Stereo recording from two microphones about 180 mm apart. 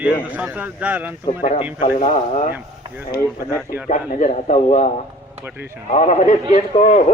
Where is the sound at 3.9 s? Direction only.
40° left (ahead or behind).